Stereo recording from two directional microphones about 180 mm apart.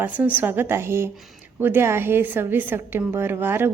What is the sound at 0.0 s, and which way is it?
A woman's voice, 10° right (ahead or behind).